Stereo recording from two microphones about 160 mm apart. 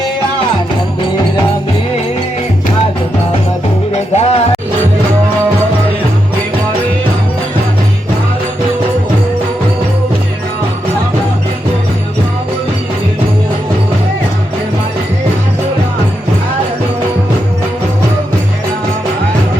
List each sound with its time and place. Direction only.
3.9 s music: 45° left (ahead or behind)